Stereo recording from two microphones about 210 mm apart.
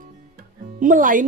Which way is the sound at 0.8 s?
40° right (ahead or behind).